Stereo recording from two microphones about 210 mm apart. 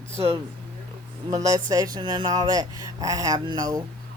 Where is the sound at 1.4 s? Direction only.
15° right (ahead or behind).